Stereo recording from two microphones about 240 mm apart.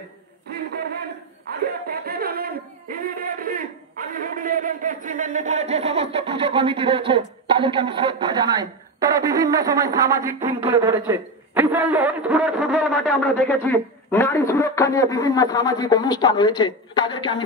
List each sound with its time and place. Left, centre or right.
0.5 s a sound: right
1.9 s speech: right; by 12.8 s centre
13.7 s a man's voice: centre